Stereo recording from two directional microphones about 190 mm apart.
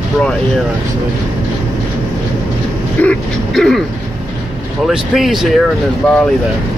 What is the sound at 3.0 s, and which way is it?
Throat clearing, 5° left (ahead or behind).